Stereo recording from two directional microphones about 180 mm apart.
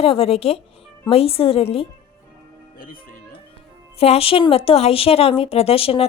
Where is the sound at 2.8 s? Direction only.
50° left (ahead or behind).